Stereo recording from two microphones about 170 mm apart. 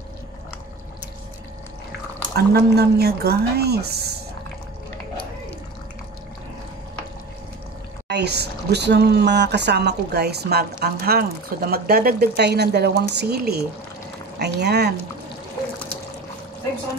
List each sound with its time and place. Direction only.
2.3 s speech: 70° right (ahead or behind)
8.1 s speech: 75° right (ahead or behind)